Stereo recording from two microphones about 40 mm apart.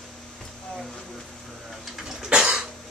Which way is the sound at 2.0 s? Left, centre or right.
Centre.